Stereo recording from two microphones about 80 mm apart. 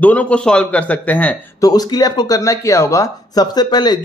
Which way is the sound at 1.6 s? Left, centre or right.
Left.